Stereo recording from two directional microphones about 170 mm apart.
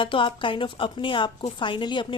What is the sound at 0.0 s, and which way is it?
A woman's voice, 30° left (ahead or behind).